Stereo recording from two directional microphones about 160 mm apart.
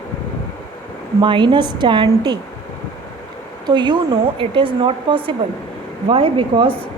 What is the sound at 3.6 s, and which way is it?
A woman's voice, 25° right (ahead or behind).